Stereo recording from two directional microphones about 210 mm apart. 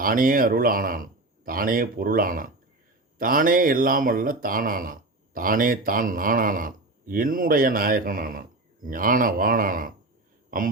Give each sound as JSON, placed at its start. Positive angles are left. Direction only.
{"t": 0.0, "sound": "speech", "side_deg": -40}